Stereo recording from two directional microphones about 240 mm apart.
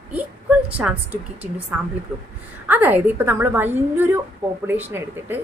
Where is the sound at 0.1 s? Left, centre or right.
Centre.